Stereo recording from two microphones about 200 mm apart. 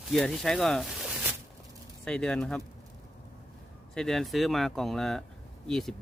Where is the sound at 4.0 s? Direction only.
Centre (ahead or behind).